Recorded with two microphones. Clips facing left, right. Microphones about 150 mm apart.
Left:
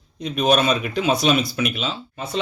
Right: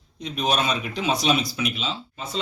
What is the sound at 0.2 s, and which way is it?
Speech, 55° left (ahead or behind).